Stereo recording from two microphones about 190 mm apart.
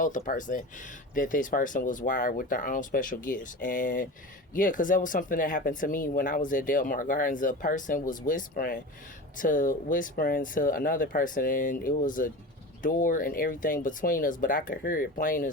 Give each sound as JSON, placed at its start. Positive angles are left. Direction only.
{"t": 0.0, "sound": "speech", "side_deg": 45}